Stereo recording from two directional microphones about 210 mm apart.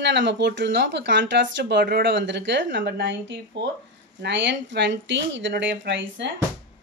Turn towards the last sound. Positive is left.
turn(degrees=-60)  # may be behind; listen again after turning